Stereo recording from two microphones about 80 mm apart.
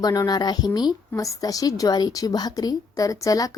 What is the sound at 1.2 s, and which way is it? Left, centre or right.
A woman's voice, left.